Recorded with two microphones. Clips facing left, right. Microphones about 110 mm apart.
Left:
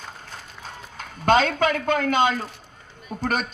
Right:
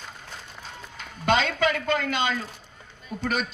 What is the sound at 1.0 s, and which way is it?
A man's voice, 45° left (ahead or behind).